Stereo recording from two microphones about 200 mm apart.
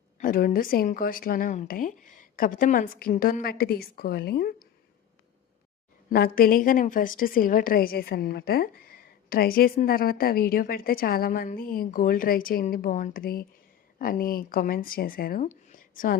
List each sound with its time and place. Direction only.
0.2 s a woman's voice: 45° left (ahead or behind)
6.1 s a woman's voice: 50° left (ahead or behind)
15.4 s a sound: 40° left (ahead or behind)